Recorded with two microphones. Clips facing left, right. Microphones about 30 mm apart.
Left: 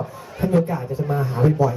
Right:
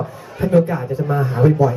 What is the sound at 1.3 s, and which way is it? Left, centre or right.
Speech, centre.